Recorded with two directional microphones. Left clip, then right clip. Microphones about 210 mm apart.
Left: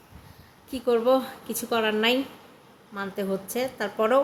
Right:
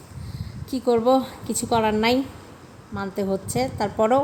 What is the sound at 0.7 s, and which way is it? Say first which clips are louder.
A woman's voice: right 3 dB; 15° right (ahead or behind).